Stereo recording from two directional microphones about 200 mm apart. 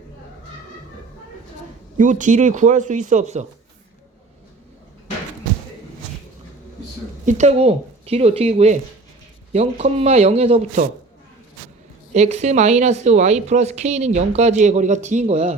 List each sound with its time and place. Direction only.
2.0 s speech: 40° right (ahead or behind)
7.3 s speech: 35° right (ahead or behind)
12.1 s speech: 35° right (ahead or behind)